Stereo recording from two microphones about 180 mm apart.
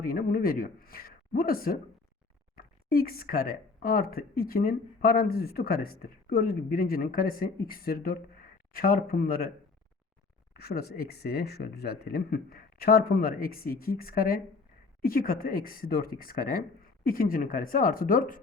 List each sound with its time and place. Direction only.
0.0 s speech: 50° left (ahead or behind)
10.5 s speech: 60° left (ahead or behind)